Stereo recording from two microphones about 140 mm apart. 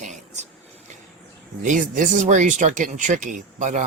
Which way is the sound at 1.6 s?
65° right (ahead or behind).